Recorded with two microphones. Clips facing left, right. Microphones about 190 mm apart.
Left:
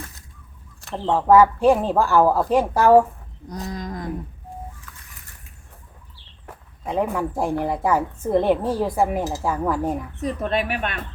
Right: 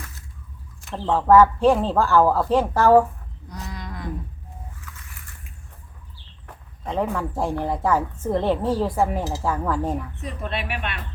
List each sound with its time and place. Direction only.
1.0 s a woman's voice: 15° left (ahead or behind)
3.5 s livestock: 40° left (ahead or behind)
6.8 s a woman's voice: 10° left (ahead or behind)
10.2 s speech: 40° left (ahead or behind)